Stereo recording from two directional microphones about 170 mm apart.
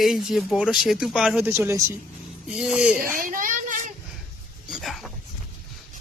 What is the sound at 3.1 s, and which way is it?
Children playing, 55° right (ahead or behind).